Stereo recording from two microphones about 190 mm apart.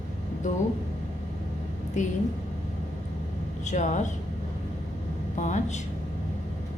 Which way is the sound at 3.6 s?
40° left (ahead or behind).